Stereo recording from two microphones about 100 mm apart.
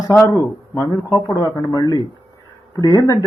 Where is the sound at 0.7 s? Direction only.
30° left (ahead or behind).